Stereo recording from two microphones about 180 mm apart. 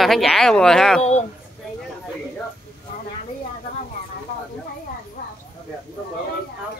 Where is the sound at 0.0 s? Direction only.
Centre (ahead or behind).